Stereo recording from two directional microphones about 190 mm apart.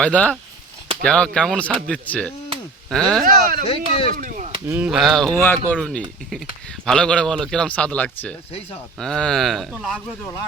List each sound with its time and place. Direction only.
0.0 s speech: 5° left (ahead or behind)
3.2 s speech: 45° right (ahead or behind)
3.7 s speech: 30° left (ahead or behind)
4.1 s speech: 45° right (ahead or behind)
4.7 s speech: 5° right (ahead or behind)